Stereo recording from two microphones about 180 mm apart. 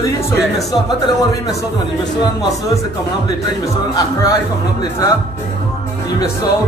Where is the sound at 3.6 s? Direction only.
20° left (ahead or behind).